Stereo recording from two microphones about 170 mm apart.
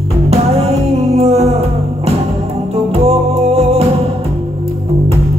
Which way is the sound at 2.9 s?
40° right (ahead or behind).